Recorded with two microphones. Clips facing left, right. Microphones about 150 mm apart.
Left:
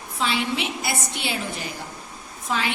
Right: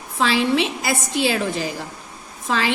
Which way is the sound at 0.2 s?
80° right.